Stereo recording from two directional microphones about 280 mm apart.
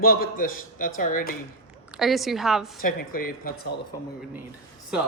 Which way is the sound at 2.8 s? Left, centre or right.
Left.